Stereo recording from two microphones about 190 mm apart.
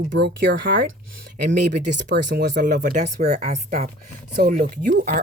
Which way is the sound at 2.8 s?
40° right (ahead or behind).